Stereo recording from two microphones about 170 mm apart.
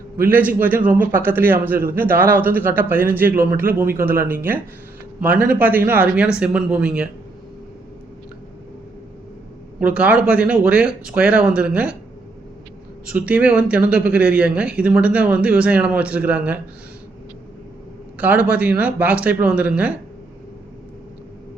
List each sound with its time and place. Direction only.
0.3 s speech: 10° right (ahead or behind)
1.7 s a man's voice: 60° right (ahead or behind)
2.0 s speech: 10° right (ahead or behind)
9.8 s speech: 10° right (ahead or behind)
13.1 s speech: 10° right (ahead or behind)
18.2 s speech: 10° right (ahead or behind)